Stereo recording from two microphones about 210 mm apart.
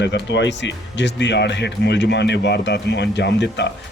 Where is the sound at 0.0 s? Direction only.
55° left (ahead or behind).